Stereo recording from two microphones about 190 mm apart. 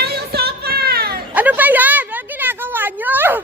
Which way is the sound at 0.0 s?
55° right (ahead or behind).